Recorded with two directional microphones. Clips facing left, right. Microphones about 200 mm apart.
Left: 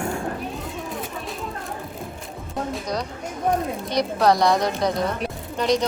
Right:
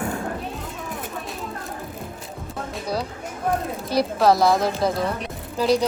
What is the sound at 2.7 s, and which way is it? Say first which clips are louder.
Music: right 3 dB; 5° right (ahead or behind).